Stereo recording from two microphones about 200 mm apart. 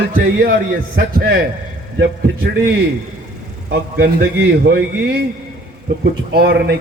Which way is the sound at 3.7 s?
55° right (ahead or behind).